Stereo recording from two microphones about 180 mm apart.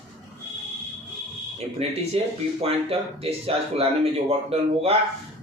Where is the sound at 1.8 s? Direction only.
35° right (ahead or behind).